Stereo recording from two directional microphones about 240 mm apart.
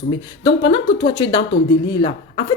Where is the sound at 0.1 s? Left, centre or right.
Left.